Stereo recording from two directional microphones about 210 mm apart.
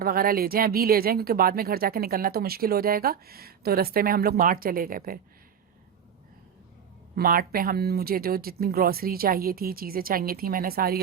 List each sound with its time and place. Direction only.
0.0 s speech: 45° right (ahead or behind)
7.2 s speech: 45° right (ahead or behind)